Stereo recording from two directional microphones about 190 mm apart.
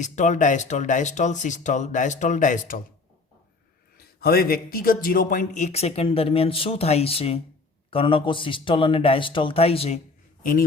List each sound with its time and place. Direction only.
0.0 s a man's voice: 40° left (ahead or behind)
3.9 s a man's voice: 55° left (ahead or behind); by 10.0 s 30° left (ahead or behind)